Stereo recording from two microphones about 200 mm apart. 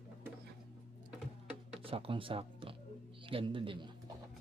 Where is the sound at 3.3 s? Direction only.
25° right (ahead or behind).